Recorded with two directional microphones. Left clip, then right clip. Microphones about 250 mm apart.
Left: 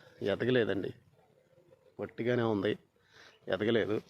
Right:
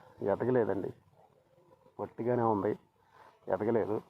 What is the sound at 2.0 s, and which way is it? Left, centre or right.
Speech, centre.